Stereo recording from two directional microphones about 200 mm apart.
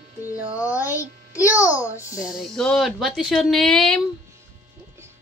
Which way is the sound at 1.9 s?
15° left (ahead or behind).